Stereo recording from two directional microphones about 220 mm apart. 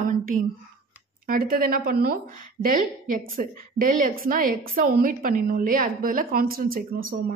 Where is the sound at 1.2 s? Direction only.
40° right (ahead or behind).